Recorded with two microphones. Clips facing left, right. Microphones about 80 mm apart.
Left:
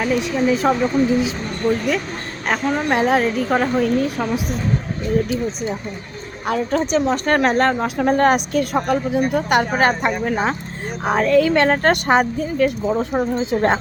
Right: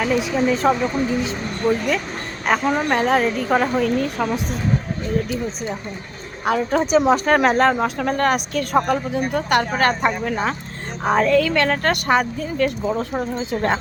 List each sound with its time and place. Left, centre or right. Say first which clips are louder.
0.0 s a woman's voice: left 1 dB; centre
1.6 s a woman's voice: left 1 dB; centre
2.9 s a woman's voice: left 3 dB; centre
6.4 s a woman's voice: right 1 dB; centre
7.9 s a woman's voice: left 4 dB; left
8.7 s a woman's voice: right 3 dB; centre
9.5 s speech: even; centre
11.3 s a woman's voice: left 3 dB; left
12.5 s speech: left 2 dB; centre
13.4 s a woman's voice: left 3 dB; left